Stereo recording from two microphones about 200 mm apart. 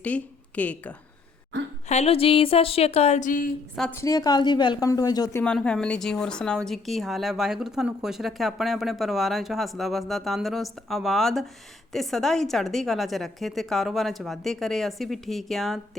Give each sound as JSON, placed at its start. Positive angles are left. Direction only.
{"t": 0.0, "sound": "a woman's voice", "side_deg": 5}
{"t": 1.9, "sound": "speech", "side_deg": 30}
{"t": 3.8, "sound": "a woman's voice", "side_deg": 10}
{"t": 5.4, "sound": "speech", "side_deg": 5}